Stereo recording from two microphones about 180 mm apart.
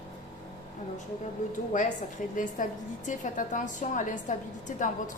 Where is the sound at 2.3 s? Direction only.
45° left (ahead or behind).